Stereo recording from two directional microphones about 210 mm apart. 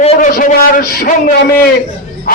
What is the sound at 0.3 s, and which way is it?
Speech, 45° left (ahead or behind).